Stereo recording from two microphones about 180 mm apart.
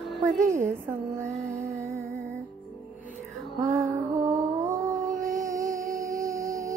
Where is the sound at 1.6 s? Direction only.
15° right (ahead or behind).